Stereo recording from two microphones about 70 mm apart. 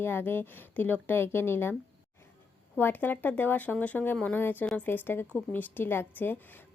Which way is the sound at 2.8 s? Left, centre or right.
Left.